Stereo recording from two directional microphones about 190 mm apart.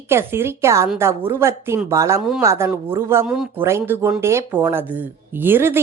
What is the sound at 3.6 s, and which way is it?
Speech, 15° right (ahead or behind).